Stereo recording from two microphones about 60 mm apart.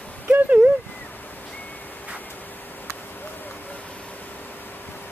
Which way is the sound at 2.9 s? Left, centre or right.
Left.